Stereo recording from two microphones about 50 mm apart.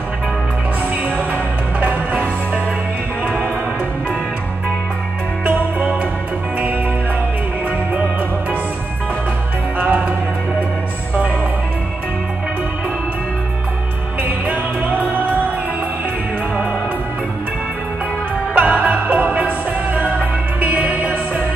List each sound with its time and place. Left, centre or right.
5.4 s music: right
9.8 s music: right
14.2 s music: right
18.5 s music: right